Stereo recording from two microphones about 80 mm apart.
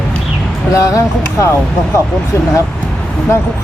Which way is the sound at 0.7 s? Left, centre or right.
Left.